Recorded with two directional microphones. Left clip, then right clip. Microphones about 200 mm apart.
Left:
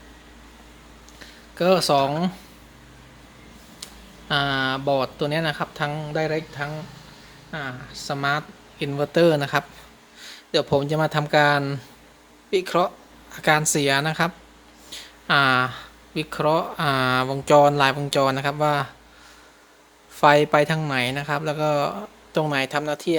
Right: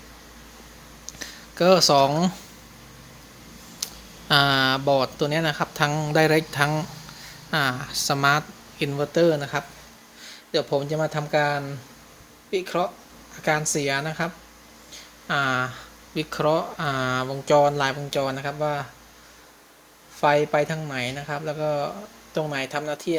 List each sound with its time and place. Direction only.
1.2 s speech: 5° right (ahead or behind)
3.8 s a sound: 10° right (ahead or behind)
4.3 s speech: 10° right (ahead or behind)
8.9 s speech: 10° left (ahead or behind)
20.2 s speech: 20° left (ahead or behind)